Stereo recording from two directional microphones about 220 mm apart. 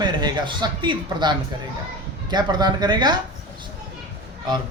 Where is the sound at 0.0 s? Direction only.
20° right (ahead or behind).